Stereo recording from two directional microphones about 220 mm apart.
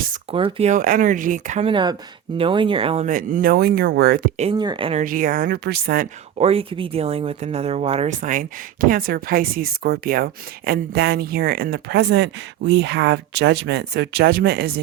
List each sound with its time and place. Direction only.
0.3 s speech: 25° right (ahead or behind); by 4.3 s 45° right (ahead or behind)
4.4 s speech: 25° right (ahead or behind)
5.0 s speech: 40° right (ahead or behind)
6.4 s speech: 25° right (ahead or behind); by 14.8 s 45° right (ahead or behind)